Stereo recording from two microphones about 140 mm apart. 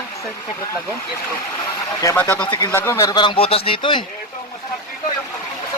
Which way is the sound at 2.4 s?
30° left (ahead or behind).